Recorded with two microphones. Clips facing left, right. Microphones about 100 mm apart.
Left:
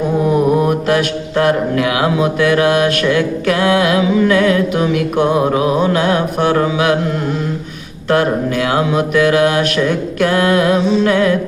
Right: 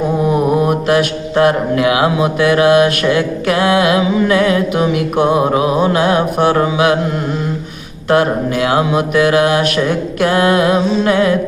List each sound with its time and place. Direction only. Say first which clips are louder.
0.3 s mantra: even; 15° right (ahead or behind)
8.1 s mantra: right 1 dB; 20° right (ahead or behind)